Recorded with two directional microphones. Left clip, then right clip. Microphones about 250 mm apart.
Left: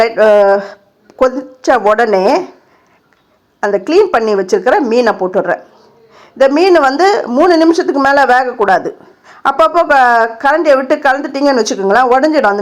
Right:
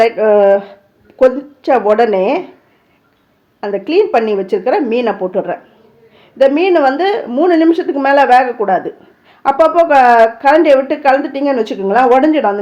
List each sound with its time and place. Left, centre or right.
0.0 s a woman's voice: centre
3.8 s a woman's voice: centre